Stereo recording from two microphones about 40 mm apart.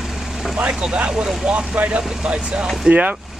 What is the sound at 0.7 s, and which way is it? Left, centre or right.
Speech, right.